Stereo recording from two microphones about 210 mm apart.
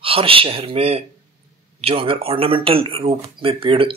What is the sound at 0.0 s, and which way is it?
Speech, 25° right (ahead or behind).